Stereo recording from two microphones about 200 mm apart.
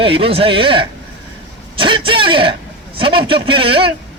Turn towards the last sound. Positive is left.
turn(degrees=-25)  # may be behind; listen again after turning